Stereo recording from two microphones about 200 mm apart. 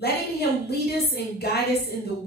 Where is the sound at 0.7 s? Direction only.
55° left (ahead or behind).